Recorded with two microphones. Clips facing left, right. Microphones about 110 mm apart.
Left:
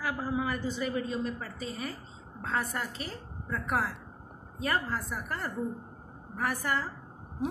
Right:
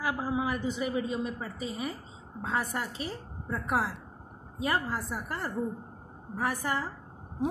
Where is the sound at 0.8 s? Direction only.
10° right (ahead or behind); by 5.4 s 30° right (ahead or behind).